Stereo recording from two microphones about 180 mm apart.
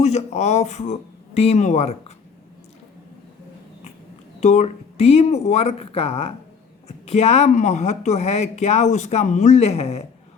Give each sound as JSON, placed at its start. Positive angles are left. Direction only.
{"t": 0.0, "sound": "speech", "side_deg": 40}
{"t": 4.4, "sound": "a woman's voice", "side_deg": 40}